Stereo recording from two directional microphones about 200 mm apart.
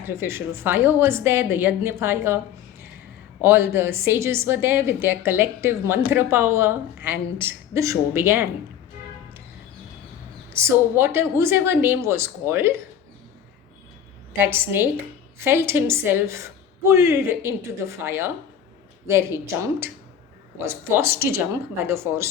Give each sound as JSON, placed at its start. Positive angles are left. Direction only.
{"t": 0.0, "sound": "a woman's voice", "side_deg": -10}
{"t": 3.4, "sound": "a woman's voice", "side_deg": -10}
{"t": 10.5, "sound": "a woman's voice", "side_deg": -10}
{"t": 14.3, "sound": "a woman's voice", "side_deg": -10}
{"t": 20.6, "sound": "a woman's voice", "side_deg": -15}